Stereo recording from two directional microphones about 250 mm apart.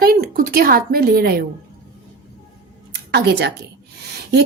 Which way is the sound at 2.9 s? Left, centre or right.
Right.